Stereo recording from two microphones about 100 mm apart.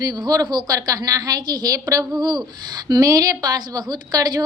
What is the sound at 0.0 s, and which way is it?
A woman's voice, 40° right (ahead or behind).